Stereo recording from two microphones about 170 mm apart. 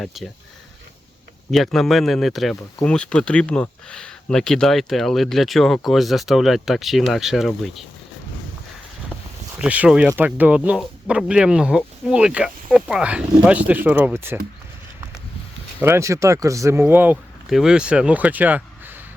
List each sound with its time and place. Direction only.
0.0 s speech: centre (ahead or behind)
1.5 s speech: centre (ahead or behind)
9.6 s speech: 10° right (ahead or behind)
15.8 s speech: 15° right (ahead or behind)